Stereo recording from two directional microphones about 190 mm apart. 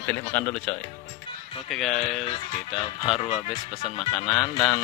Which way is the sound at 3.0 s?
25° left (ahead or behind).